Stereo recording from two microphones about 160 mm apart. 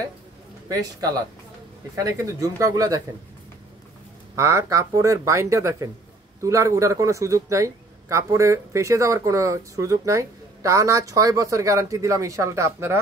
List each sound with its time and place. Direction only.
2.0 s a man's voice: 20° right (ahead or behind)
4.4 s a man's voice: 20° right (ahead or behind)